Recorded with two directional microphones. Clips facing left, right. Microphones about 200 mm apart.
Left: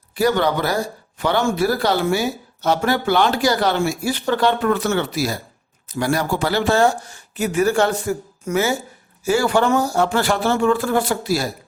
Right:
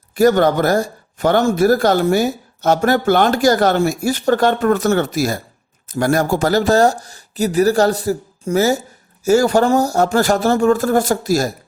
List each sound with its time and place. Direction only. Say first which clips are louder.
0.2 s speech: right 5 dB; 45° right (ahead or behind)